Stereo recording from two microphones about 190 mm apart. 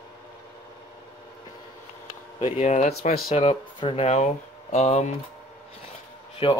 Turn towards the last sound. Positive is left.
turn(degrees=25)  # may be behind; listen again after turning